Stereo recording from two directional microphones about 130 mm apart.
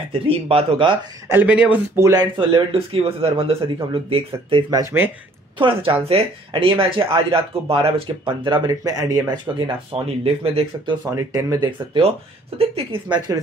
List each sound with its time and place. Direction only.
0.1 s speech: 45° right (ahead or behind)
1.2 s speech: 15° right (ahead or behind)
2.0 s speech: 20° right (ahead or behind)
2.3 s speech: 45° right (ahead or behind)
4.9 s speech: 15° right (ahead or behind)
5.6 s speech: 45° right (ahead or behind)
8.6 s speech: 30° right (ahead or behind)
9.8 s speech: 45° right (ahead or behind)
11.1 s speech: 25° right (ahead or behind)
12.5 s speech: 45° right (ahead or behind)